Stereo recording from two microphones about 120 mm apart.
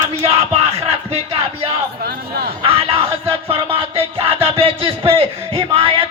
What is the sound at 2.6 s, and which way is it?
Music, 55° right (ahead or behind).